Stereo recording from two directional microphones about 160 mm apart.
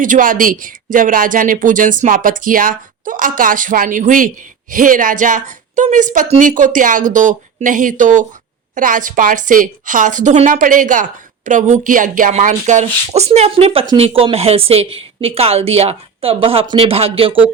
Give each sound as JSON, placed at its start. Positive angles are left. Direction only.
{"t": 0.0, "sound": "speech", "side_deg": -55}